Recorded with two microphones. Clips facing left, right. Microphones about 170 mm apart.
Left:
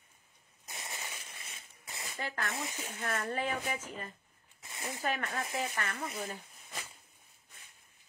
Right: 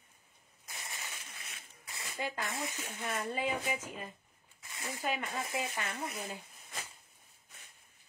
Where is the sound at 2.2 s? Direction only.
20° right (ahead or behind).